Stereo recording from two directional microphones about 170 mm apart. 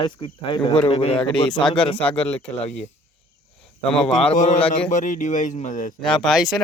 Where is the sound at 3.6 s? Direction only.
5° left (ahead or behind).